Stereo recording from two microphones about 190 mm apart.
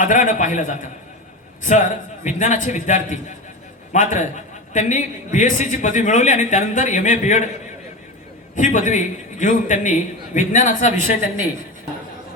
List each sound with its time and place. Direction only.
0.0 s a man's voice: 45° left (ahead or behind)
8.5 s a man's voice: 40° left (ahead or behind)